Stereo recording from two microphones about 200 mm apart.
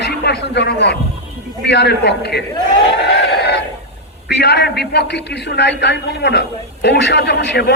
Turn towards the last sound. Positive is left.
turn(degrees=60)  # may be behind; listen again after turning